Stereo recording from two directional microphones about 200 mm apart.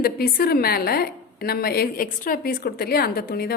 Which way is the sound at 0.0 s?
50° left (ahead or behind).